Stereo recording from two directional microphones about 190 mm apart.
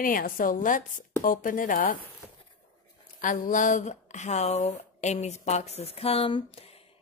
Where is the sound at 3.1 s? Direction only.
45° left (ahead or behind).